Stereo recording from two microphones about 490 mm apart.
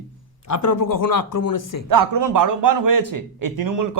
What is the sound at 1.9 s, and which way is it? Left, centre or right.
A man's voice, right.